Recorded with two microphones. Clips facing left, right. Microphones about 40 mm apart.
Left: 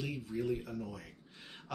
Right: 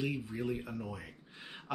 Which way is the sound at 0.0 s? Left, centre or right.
Centre.